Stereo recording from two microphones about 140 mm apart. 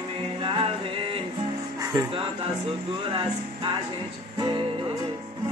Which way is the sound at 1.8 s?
25° right (ahead or behind).